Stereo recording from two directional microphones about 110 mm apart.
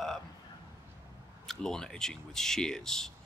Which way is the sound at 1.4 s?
5° left (ahead or behind).